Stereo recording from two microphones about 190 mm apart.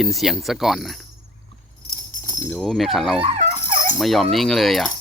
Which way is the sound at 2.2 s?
15° left (ahead or behind).